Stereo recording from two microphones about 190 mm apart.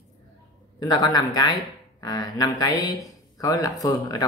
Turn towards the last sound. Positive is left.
turn(degrees=20)  # may be behind; listen again after turning